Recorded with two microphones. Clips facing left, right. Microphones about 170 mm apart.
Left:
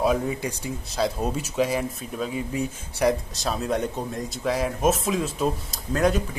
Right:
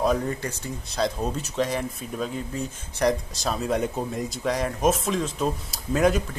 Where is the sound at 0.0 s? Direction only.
5° left (ahead or behind).